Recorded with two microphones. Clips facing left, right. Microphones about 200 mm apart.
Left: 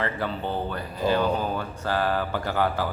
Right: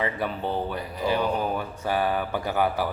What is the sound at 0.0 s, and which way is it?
Speech, 15° right (ahead or behind).